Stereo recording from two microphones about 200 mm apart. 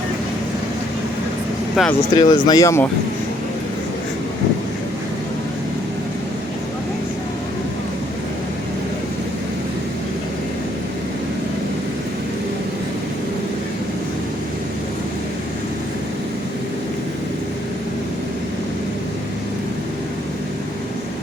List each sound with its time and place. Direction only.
1.7 s speech: centre (ahead or behind)
2.1 s speech: 20° left (ahead or behind)